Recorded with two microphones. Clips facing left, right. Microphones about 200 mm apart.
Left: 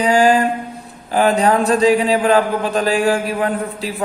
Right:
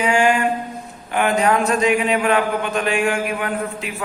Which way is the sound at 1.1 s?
35° left (ahead or behind).